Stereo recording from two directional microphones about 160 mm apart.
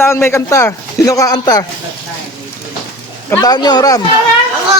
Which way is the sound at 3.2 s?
20° left (ahead or behind).